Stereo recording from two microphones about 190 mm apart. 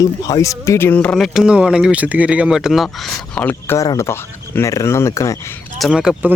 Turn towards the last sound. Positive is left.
turn(degrees=-5)  # may be behind; listen again after turning